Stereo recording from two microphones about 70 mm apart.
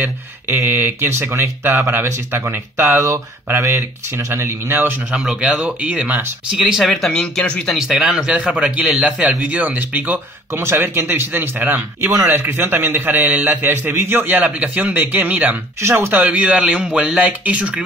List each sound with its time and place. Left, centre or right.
0.7 s speech: right
5.1 s a man's voice: centre
5.6 s a man's voice: centre
6.5 s speech: centre
7.1 s speech: centre
7.7 s a man's voice: centre; by 10.2 s right
10.5 s a man's voice: right; by 17.8 s centre